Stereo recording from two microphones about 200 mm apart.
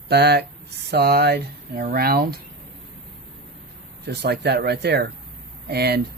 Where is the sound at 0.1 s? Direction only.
55° right (ahead or behind).